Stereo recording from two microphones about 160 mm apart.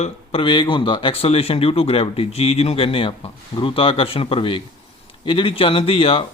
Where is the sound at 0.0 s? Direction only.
35° left (ahead or behind).